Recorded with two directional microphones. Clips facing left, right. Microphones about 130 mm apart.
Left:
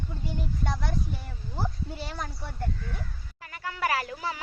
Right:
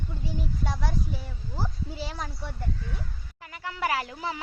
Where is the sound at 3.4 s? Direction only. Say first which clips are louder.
Even; 20° right (ahead or behind).